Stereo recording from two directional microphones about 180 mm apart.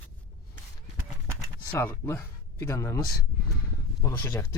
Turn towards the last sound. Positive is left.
turn(degrees=20)  # may be behind; listen again after turning